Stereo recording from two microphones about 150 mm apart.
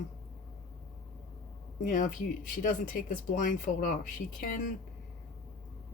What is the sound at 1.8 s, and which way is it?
Speech, 60° left (ahead or behind).